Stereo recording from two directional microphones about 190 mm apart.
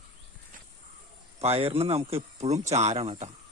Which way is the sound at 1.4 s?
30° right (ahead or behind).